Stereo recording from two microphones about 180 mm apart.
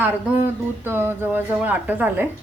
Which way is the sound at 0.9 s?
10° right (ahead or behind).